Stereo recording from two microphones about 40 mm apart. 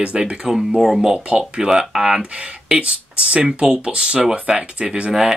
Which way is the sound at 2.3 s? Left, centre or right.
Right.